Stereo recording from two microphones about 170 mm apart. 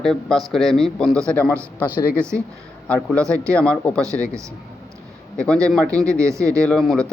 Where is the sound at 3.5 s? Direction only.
5° left (ahead or behind).